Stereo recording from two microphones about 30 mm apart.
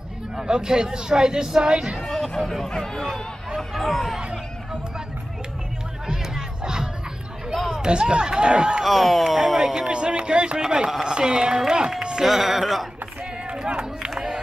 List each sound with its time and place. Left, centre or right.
0.5 s speech: right
2.0 s chatter: centre
2.6 s speech: centre
3.5 s speech: centre
6.0 s crowd: right
7.7 s speech: right
8.8 s speech: centre
9.8 s speech: right
12.3 s speech: centre
13.5 s run: right
14.1 s crowd: centre